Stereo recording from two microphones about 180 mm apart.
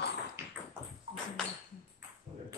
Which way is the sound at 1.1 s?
30° right (ahead or behind).